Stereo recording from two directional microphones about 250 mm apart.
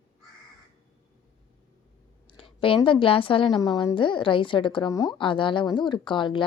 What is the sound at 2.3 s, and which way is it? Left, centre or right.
A woman's voice, left.